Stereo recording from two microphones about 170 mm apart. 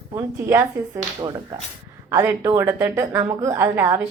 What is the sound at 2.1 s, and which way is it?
A woman's voice, 15° right (ahead or behind).